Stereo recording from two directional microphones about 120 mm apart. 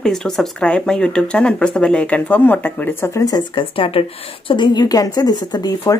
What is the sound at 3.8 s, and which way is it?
A woman's voice, 50° left (ahead or behind).